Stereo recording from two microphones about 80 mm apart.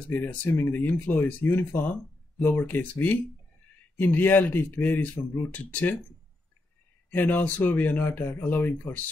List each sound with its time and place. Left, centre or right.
0.1 s speech: left
7.1 s speech: left